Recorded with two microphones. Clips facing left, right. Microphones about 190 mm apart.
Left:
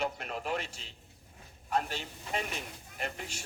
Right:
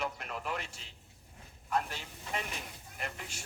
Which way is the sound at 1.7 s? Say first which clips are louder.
Left 2 dB; 30° left (ahead or behind).